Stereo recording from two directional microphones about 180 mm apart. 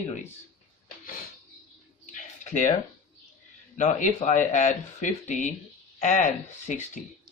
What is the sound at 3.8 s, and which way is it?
Speech, 40° left (ahead or behind).